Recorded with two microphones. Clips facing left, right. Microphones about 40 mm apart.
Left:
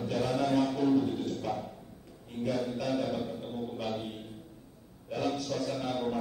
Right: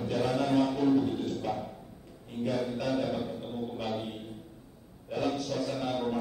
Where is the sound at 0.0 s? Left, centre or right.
Centre.